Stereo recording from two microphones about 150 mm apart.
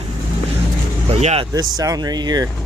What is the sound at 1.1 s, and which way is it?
Speech, 45° right (ahead or behind).